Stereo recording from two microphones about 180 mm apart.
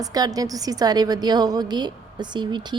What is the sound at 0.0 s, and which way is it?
A woman's voice, 20° right (ahead or behind).